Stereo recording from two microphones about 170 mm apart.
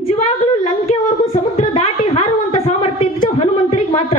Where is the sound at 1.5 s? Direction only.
40° left (ahead or behind).